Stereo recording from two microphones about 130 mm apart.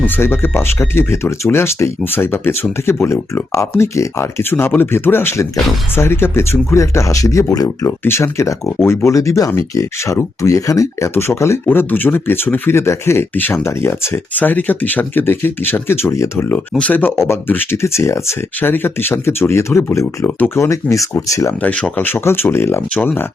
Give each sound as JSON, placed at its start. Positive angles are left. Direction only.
{"t": 0.0, "sound": "speech", "side_deg": 15}
{"t": 21.6, "sound": "speech", "side_deg": 10}